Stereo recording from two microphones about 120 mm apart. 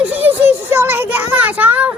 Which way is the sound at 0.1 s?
15° right (ahead or behind).